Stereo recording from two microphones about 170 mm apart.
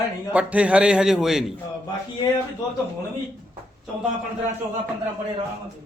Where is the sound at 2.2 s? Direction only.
25° left (ahead or behind).